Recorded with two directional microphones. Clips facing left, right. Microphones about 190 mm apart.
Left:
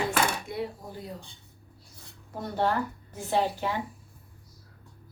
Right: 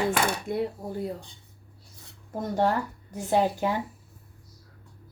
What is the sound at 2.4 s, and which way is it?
Speech, 45° right (ahead or behind).